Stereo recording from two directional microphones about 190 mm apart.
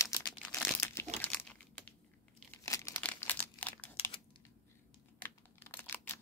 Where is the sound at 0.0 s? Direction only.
15° left (ahead or behind).